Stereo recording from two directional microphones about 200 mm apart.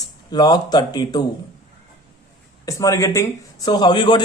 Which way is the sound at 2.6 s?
15° left (ahead or behind).